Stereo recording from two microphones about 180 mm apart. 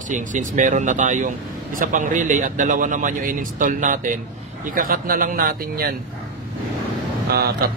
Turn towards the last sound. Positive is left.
turn(degrees=-60)  # may be behind; listen again after turning